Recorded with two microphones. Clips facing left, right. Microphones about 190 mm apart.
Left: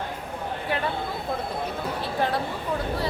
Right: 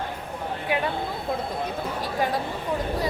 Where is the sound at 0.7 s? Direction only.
15° right (ahead or behind).